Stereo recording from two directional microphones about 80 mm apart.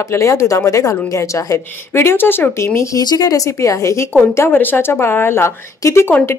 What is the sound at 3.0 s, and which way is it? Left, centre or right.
A woman's voice, left.